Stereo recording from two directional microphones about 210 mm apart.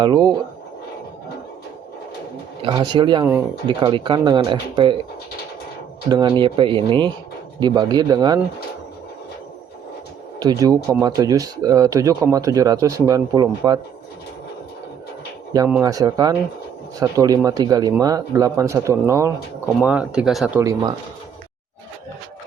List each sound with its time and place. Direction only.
0.0 s speech: 20° right (ahead or behind)
2.6 s speech: 20° right (ahead or behind)
6.1 s speech: 20° right (ahead or behind)
10.4 s speech: 15° right (ahead or behind)
15.8 s speech: 15° right (ahead or behind)
20.6 s speech: 15° right (ahead or behind)